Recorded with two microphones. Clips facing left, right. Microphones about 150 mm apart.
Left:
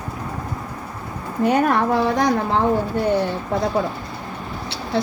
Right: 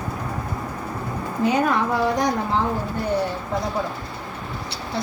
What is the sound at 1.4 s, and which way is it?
Speech, 60° left (ahead or behind).